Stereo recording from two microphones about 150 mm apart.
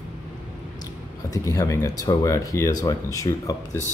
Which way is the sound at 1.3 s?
20° left (ahead or behind).